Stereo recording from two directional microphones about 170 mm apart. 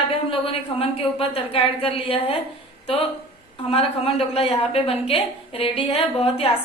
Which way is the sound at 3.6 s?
35° left (ahead or behind).